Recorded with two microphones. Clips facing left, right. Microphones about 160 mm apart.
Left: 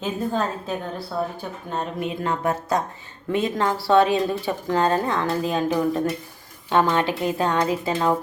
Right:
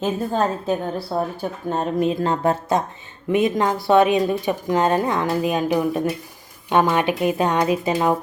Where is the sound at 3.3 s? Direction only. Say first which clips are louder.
Right 4 dB; 20° right (ahead or behind).